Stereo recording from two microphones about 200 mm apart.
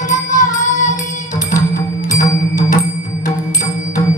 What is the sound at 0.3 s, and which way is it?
Music, 40° left (ahead or behind).